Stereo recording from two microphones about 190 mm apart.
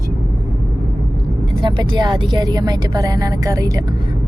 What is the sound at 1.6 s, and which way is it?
Speech, 25° right (ahead or behind).